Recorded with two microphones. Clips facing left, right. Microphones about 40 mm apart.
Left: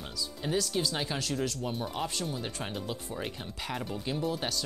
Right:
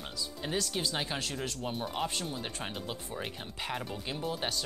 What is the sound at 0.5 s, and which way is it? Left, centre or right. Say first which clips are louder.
Speech: left 3 dB; right.